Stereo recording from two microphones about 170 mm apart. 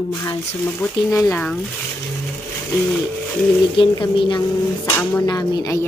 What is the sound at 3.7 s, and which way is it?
Speech, 30° left (ahead or behind).